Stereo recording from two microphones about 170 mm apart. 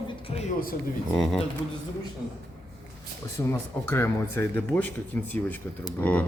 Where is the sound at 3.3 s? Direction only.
15° left (ahead or behind).